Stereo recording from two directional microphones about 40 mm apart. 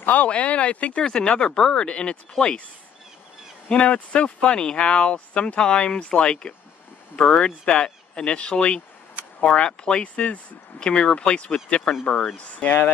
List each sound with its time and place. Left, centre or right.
0.0 s speech: left
0.3 s speech: left
1.0 s speech: left
3.6 s speech: left
10.0 s speech: left
10.8 s speech: left